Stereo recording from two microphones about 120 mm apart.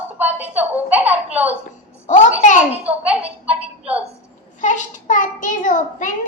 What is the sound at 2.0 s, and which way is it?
Speech, 90° left.